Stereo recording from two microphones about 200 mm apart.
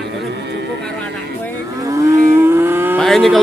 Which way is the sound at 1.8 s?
15° right (ahead or behind).